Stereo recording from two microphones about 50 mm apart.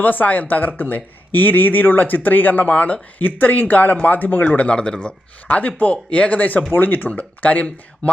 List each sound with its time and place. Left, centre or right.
0.0 s speech: left
4.7 s speech: centre